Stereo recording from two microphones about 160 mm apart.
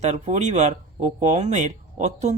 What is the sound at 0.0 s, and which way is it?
Speech, 45° right (ahead or behind).